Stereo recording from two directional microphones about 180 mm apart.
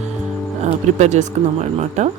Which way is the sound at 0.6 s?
40° right (ahead or behind).